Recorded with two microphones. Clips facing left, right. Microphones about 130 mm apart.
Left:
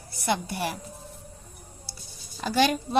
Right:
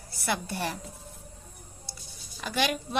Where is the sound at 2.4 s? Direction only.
35° left (ahead or behind).